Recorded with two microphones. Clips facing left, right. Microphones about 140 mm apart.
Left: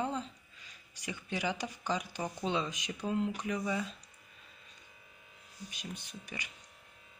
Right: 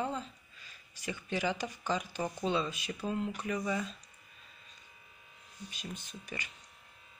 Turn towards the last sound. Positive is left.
turn(degrees=15)  # may be behind; listen again after turning